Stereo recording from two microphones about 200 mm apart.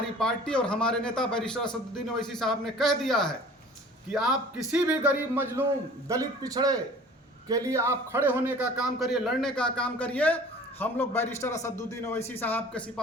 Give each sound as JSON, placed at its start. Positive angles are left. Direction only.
{"t": 0.2, "sound": "a man's voice", "side_deg": 5}